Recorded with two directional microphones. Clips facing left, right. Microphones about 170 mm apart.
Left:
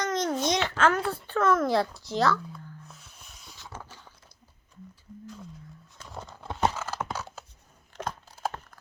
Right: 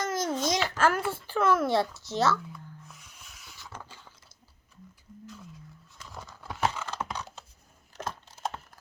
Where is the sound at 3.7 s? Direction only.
15° left (ahead or behind).